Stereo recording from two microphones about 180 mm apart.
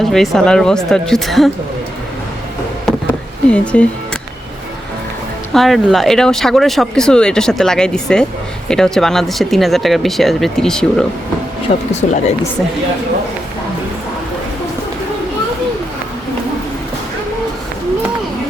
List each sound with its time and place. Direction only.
0.0 s speech: centre (ahead or behind)
3.5 s speech: 5° left (ahead or behind)
5.5 s speech: centre (ahead or behind)
12.0 s speech: 40° left (ahead or behind)